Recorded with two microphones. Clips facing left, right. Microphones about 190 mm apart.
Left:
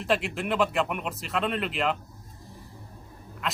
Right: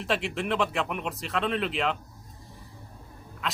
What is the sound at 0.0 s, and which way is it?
A man's voice, centre (ahead or behind).